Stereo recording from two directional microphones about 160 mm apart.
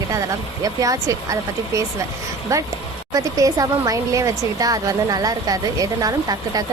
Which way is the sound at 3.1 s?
20° right (ahead or behind).